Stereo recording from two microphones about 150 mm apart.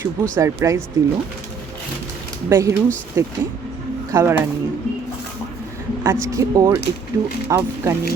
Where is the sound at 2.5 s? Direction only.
20° right (ahead or behind).